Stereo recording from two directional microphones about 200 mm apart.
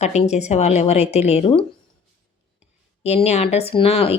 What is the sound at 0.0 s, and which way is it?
Speech, 35° left (ahead or behind).